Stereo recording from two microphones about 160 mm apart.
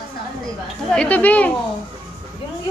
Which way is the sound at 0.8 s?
5° left (ahead or behind).